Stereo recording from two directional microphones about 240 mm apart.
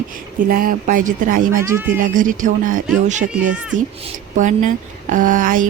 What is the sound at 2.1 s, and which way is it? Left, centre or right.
Speech, right.